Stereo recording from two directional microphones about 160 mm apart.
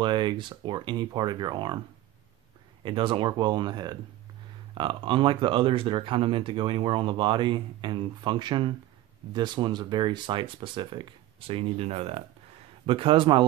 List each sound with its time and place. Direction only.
0.0 s speech: 30° right (ahead or behind)
2.8 s speech: 30° right (ahead or behind)